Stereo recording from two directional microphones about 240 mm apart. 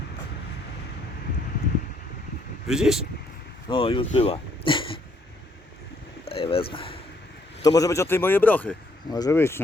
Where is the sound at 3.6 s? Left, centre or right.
Left.